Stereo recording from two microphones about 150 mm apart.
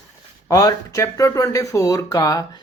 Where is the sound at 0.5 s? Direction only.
25° left (ahead or behind).